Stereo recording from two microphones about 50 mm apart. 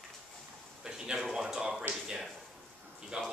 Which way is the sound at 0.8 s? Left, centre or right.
Centre.